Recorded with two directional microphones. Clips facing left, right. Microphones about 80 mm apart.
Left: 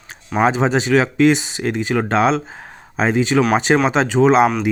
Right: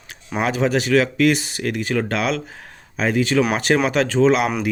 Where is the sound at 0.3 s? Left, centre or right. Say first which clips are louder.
Left 4 dB; left.